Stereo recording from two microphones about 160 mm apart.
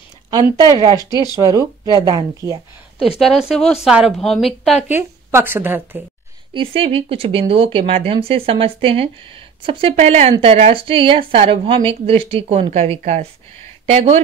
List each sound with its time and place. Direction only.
0.3 s speech: 25° right (ahead or behind)
0.9 s speech: 25° left (ahead or behind)
1.5 s speech: 20° right (ahead or behind)
3.0 s a woman's voice: centre (ahead or behind)
4.8 s speech: 15° right (ahead or behind)
6.5 s speech: 35° right (ahead or behind)